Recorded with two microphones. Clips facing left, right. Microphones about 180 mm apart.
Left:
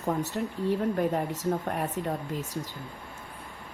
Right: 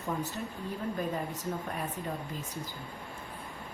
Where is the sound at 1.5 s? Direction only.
60° left (ahead or behind).